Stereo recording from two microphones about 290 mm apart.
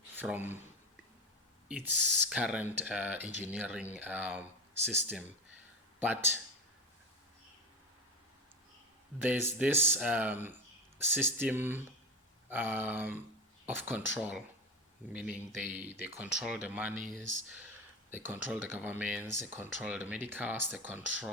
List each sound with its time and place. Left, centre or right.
0.2 s speech: centre
1.6 s speech: centre
9.1 s speech: centre
17.0 s speech: right
18.1 s speech: centre